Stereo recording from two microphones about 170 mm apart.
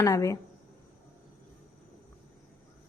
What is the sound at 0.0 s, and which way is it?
Speech, 20° left (ahead or behind).